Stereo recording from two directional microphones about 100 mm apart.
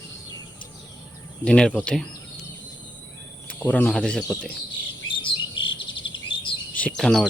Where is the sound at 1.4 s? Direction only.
10° left (ahead or behind).